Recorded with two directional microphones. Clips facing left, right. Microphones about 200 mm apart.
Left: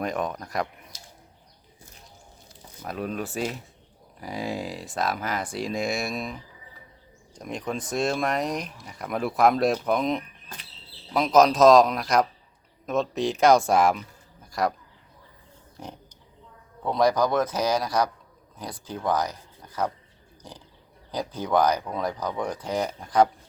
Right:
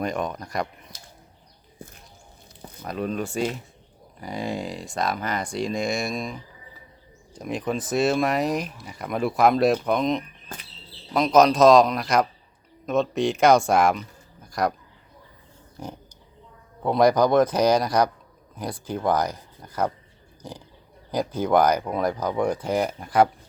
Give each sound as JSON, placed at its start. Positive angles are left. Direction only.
{"t": 0.0, "sound": "speech", "side_deg": 0}
{"t": 1.8, "sound": "a sound", "side_deg": -55}
{"t": 2.8, "sound": "speech", "side_deg": 5}
{"t": 15.8, "sound": "pig", "side_deg": 0}
{"t": 16.8, "sound": "speech", "side_deg": -10}
{"t": 21.1, "sound": "speech", "side_deg": -10}